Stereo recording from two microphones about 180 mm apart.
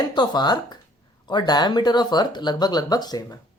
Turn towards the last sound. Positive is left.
turn(degrees=20)  # may be behind; listen again after turning